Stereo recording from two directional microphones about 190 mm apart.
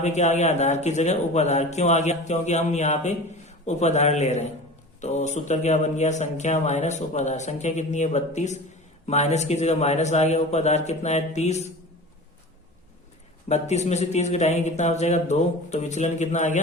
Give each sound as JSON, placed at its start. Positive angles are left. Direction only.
{"t": 0.0, "sound": "speech", "side_deg": 35}
{"t": 13.5, "sound": "speech", "side_deg": 35}